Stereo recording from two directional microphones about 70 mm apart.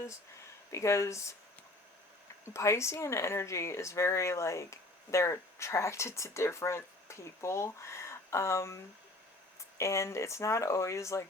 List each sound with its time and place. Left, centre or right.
0.7 s speech: left
2.5 s speech: left